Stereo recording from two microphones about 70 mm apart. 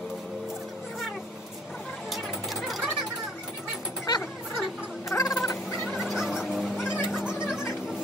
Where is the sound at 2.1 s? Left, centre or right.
Centre.